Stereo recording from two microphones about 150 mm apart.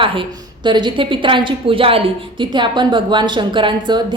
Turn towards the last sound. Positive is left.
turn(degrees=-30)  # may be behind; listen again after turning